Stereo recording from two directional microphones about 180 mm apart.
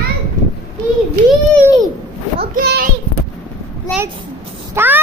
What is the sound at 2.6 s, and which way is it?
Speech, 60° right (ahead or behind).